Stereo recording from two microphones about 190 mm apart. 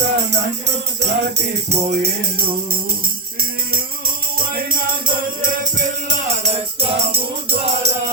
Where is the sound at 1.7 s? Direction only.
35° right (ahead or behind).